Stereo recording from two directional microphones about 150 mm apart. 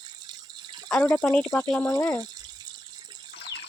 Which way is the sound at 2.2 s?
25° right (ahead or behind).